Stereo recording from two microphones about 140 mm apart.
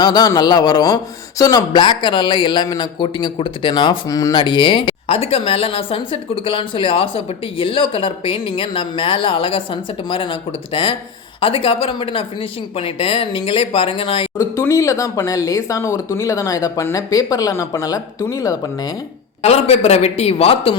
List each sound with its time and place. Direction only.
0.0 s a man's voice: 30° left (ahead or behind)
11.3 s a man's voice: 40° left (ahead or behind)
14.3 s speech: 20° left (ahead or behind)
19.4 s speech: 50° left (ahead or behind)